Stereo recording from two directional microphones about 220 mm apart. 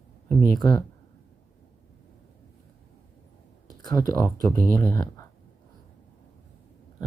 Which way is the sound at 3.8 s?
15° left (ahead or behind).